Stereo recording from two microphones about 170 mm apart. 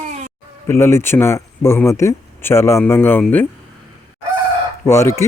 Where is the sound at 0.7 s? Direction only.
15° left (ahead or behind).